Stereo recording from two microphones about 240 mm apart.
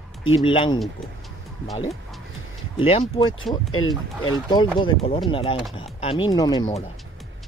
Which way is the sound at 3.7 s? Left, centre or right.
Left.